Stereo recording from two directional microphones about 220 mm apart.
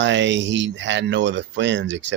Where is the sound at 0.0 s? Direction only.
55° right (ahead or behind).